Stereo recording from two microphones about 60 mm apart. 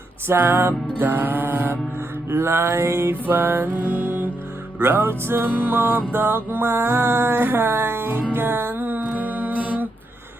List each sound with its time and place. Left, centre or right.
0.3 s music: right
3.2 s music: right
5.5 s music: right